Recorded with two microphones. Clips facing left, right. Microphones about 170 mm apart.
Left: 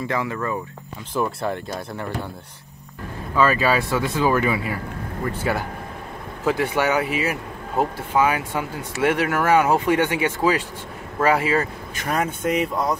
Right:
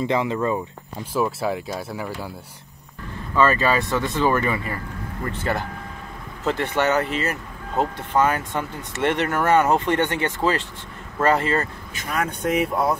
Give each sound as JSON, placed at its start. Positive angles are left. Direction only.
{"t": 0.0, "sound": "speech", "side_deg": -20}
{"t": 1.1, "sound": "speech", "side_deg": -5}
{"t": 3.3, "sound": "speech", "side_deg": 5}